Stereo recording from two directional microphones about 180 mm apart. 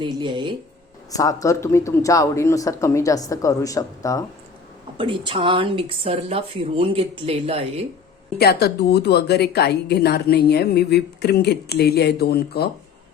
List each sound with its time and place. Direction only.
0.0 s speech: 25° right (ahead or behind)
1.1 s speech: 20° left (ahead or behind)
4.9 s speech: 30° right (ahead or behind)
8.4 s a woman's voice: 60° left (ahead or behind)